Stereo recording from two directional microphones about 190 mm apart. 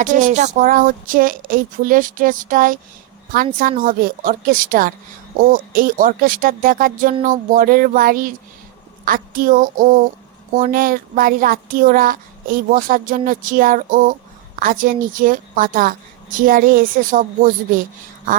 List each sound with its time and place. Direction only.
0.0 s speech: 40° right (ahead or behind)